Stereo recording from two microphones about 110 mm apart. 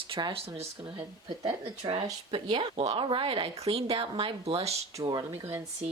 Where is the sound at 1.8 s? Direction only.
50° right (ahead or behind).